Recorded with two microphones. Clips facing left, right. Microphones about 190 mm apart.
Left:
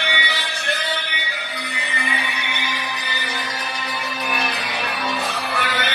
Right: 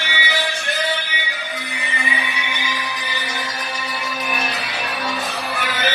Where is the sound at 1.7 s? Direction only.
55° left (ahead or behind).